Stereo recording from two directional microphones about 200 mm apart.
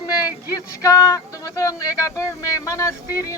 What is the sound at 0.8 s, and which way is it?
Speech, 15° left (ahead or behind).